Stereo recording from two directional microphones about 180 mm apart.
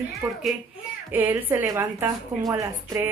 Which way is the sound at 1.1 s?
10° right (ahead or behind).